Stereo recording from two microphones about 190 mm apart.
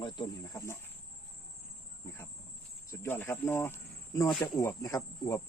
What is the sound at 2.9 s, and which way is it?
Speech, 10° left (ahead or behind).